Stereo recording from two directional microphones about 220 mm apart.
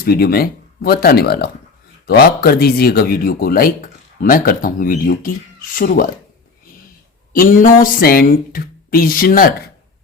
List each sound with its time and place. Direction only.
0.0 s speech: 45° left (ahead or behind)
7.3 s speech: 40° left (ahead or behind)